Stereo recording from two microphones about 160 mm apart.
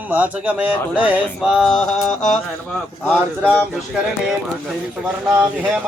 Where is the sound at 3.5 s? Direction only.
5° right (ahead or behind).